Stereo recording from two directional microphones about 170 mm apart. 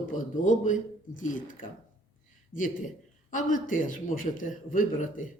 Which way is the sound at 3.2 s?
50° left (ahead or behind).